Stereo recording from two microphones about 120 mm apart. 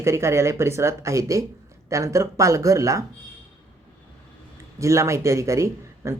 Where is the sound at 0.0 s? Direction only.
25° right (ahead or behind).